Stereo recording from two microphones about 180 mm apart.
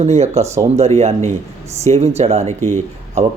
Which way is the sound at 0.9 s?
40° right (ahead or behind).